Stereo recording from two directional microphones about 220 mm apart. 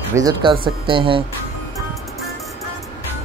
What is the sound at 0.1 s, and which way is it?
Speech, 15° right (ahead or behind).